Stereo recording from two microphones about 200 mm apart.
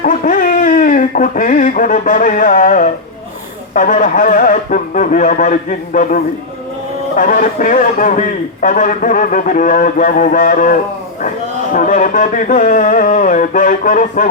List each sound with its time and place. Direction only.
0.0 s speech: 40° left (ahead or behind)